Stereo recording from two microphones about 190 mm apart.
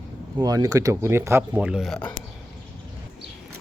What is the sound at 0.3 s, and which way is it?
Speech, 20° right (ahead or behind).